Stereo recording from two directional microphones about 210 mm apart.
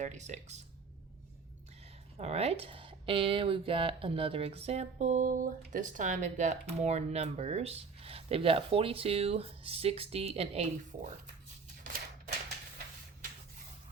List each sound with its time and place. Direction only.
0.0 s speech: 35° right (ahead or behind)
2.1 s speech: 30° right (ahead or behind)